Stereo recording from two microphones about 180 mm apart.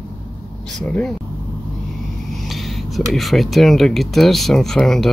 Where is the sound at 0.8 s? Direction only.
5° left (ahead or behind).